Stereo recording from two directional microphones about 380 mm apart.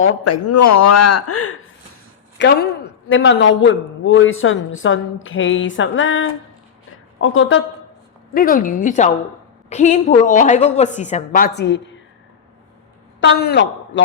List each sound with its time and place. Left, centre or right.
0.0 s a man's voice: left
13.1 s a man's voice: left